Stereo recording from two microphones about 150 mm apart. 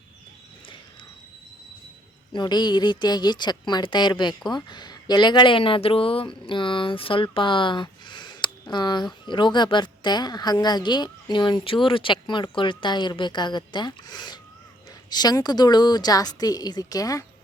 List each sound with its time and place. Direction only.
2.3 s a woman's voice: 30° left (ahead or behind)